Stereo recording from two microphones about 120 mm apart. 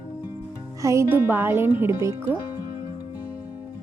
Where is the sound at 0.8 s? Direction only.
25° right (ahead or behind).